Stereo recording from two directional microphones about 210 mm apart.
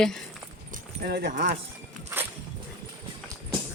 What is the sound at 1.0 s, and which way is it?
Speech, 45° right (ahead or behind).